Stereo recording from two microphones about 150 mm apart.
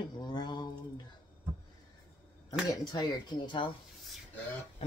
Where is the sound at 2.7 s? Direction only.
25° left (ahead or behind).